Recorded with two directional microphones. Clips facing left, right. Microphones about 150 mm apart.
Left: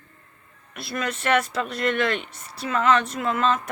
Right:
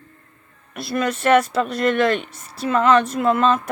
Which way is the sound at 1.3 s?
35° right (ahead or behind).